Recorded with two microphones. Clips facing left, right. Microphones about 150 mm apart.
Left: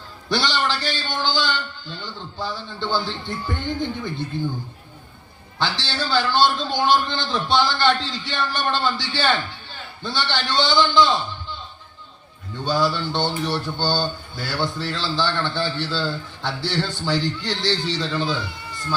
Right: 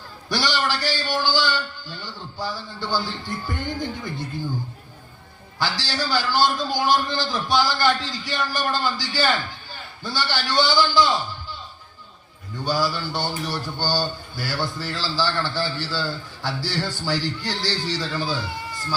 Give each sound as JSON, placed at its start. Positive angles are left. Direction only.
{"t": 0.3, "sound": "speech", "side_deg": 25}
{"t": 5.5, "sound": "speech", "side_deg": 25}
{"t": 12.6, "sound": "speech", "side_deg": 20}